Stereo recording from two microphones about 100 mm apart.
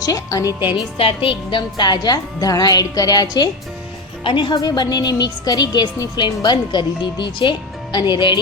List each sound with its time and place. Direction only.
0.0 s a woman's voice: 40° left (ahead or behind)
0.9 s a woman's voice: 65° left (ahead or behind); by 3.5 s 40° left (ahead or behind)
4.2 s a woman's voice: 55° left (ahead or behind)
4.5 s a woman's voice: 45° left (ahead or behind)